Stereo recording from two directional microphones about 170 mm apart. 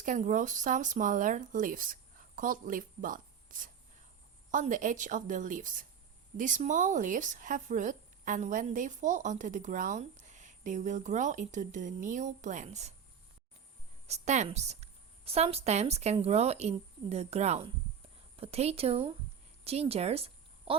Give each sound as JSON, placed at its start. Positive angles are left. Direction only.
{"t": 0.0, "sound": "speech", "side_deg": -50}
{"t": 14.1, "sound": "a woman's voice", "side_deg": -40}